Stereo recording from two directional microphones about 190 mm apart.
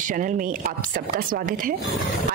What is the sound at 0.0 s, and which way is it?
Speech, 45° right (ahead or behind).